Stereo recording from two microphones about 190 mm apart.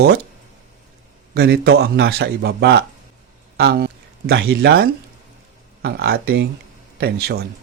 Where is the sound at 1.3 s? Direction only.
60° right (ahead or behind).